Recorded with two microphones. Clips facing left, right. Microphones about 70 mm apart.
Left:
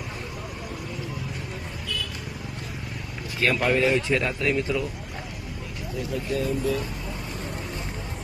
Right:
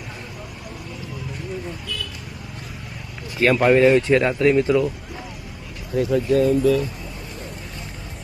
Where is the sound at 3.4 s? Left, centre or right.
Right.